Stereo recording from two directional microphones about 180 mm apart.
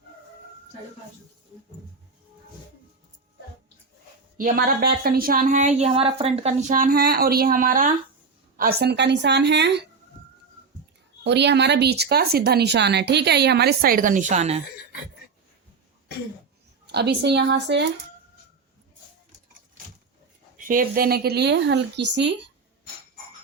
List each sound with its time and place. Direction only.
4.4 s a woman's voice: 50° right (ahead or behind); by 9.8 s 70° right (ahead or behind)
11.2 s speech: 70° right (ahead or behind); by 14.6 s 35° right (ahead or behind)
16.8 s a woman's voice: 65° right (ahead or behind)
20.6 s speech: 50° right (ahead or behind); by 22.4 s 75° right (ahead or behind)